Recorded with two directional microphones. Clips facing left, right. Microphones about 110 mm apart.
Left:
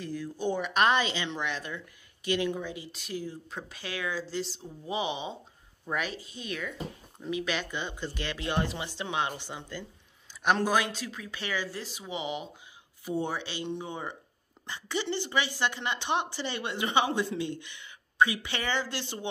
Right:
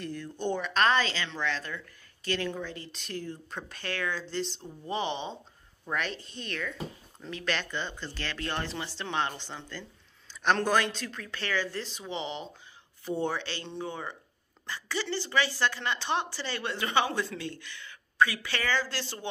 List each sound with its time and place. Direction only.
0.0 s speech: 5° left (ahead or behind)